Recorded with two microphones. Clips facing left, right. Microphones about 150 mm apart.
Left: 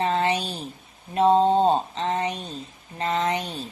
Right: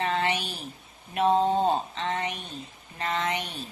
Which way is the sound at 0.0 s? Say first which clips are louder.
Left 4 dB; 35° left (ahead or behind).